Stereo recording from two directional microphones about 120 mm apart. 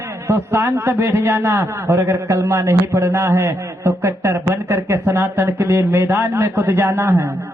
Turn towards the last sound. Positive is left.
turn(degrees=-20)  # may be behind; listen again after turning